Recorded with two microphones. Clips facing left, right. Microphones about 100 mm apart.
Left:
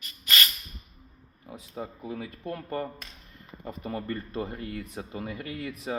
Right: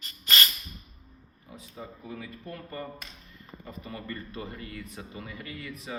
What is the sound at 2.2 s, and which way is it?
Speech, 65° left (ahead or behind).